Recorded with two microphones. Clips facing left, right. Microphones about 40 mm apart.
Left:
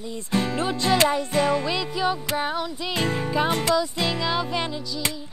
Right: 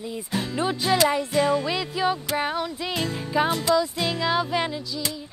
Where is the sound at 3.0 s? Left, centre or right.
Left.